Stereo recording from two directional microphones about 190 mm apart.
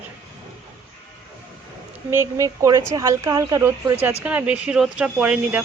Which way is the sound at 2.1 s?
15° right (ahead or behind).